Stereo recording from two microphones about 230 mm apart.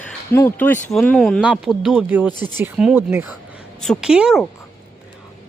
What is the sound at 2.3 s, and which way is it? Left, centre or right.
Speech, centre.